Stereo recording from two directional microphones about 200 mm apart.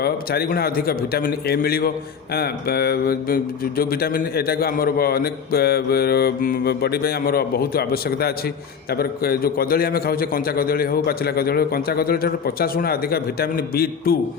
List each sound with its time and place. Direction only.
0.0 s speech: 50° left (ahead or behind)